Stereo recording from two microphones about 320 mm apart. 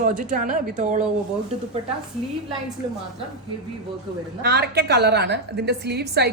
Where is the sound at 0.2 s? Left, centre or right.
Right.